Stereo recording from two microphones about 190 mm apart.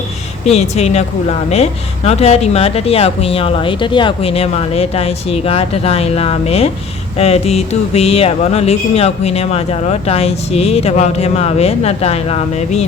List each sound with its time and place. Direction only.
0.4 s speech: 35° left (ahead or behind)